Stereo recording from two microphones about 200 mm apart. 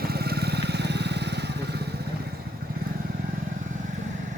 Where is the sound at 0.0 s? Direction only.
50° right (ahead or behind).